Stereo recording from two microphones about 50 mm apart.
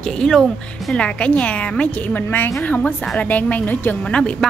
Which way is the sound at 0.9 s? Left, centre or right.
Left.